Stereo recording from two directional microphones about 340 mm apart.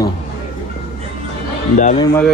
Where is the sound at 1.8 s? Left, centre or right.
Left.